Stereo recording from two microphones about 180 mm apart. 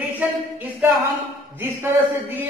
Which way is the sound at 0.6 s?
10° right (ahead or behind).